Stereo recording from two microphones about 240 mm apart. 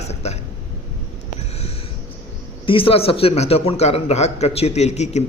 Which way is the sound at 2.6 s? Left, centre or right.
Left.